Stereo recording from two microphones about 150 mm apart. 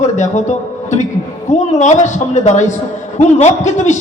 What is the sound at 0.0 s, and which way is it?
A man's voice, 50° left (ahead or behind).